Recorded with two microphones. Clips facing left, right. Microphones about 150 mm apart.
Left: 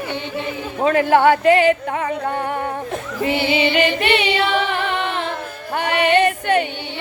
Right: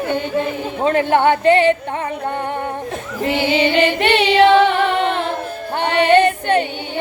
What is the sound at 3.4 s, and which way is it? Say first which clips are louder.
Singing: right 3 dB; 45° right (ahead or behind).